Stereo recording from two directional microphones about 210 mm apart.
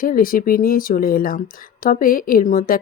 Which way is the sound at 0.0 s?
45° left (ahead or behind).